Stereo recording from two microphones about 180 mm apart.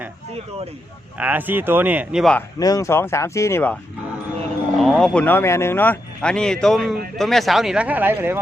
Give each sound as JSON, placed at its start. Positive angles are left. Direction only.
{"t": 1.2, "sound": "speech", "side_deg": -10}
{"t": 2.6, "sound": "speech", "side_deg": 20}
{"t": 4.8, "sound": "speech", "side_deg": 5}